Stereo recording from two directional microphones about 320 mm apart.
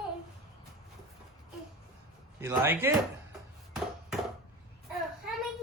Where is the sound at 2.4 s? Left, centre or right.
Centre.